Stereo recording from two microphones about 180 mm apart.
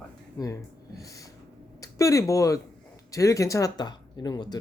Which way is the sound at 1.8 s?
15° left (ahead or behind).